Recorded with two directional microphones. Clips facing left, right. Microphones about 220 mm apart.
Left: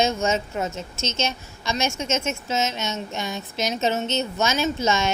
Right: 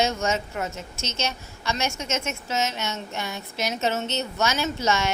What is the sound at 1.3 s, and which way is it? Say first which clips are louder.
A woman's voice: left 1 dB; 15° left (ahead or behind).